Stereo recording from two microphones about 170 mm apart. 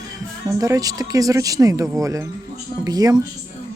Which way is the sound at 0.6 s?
20° right (ahead or behind).